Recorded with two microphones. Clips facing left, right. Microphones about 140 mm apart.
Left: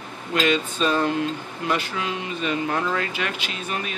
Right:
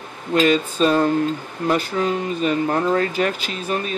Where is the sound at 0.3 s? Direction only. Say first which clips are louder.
Right 5 dB; 40° right (ahead or behind).